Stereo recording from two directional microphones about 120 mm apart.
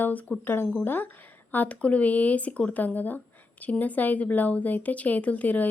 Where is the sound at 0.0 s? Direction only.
15° left (ahead or behind).